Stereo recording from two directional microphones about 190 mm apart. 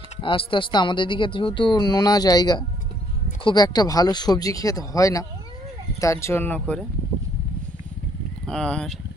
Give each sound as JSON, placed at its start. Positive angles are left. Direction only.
{"t": 0.2, "sound": "speech", "side_deg": 25}
{"t": 8.5, "sound": "speech", "side_deg": 5}